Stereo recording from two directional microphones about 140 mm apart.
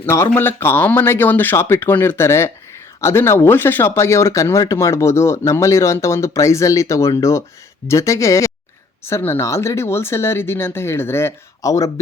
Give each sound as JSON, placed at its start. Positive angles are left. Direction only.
{"t": 0.0, "sound": "speech", "side_deg": 15}